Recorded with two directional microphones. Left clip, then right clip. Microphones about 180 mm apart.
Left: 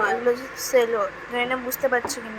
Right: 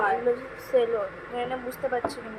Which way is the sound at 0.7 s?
5° left (ahead or behind).